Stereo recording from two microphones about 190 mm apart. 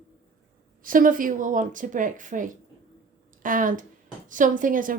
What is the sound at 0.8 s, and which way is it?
A woman's voice, 45° right (ahead or behind).